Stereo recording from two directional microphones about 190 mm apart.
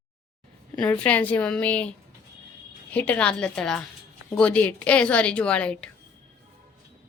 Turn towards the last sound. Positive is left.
turn(degrees=5)  # may be behind; listen again after turning